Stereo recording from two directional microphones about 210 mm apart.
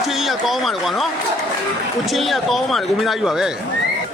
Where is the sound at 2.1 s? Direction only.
Centre (ahead or behind).